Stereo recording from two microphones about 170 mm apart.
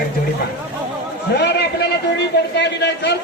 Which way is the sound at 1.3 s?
75° left (ahead or behind).